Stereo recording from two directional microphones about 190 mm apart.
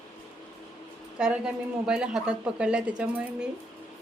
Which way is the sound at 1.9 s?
5° right (ahead or behind).